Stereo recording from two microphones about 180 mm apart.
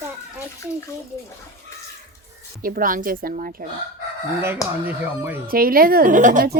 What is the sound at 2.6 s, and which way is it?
Speech, 50° right (ahead or behind).